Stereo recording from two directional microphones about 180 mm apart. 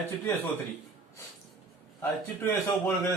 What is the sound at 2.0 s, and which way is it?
Speech, 15° left (ahead or behind).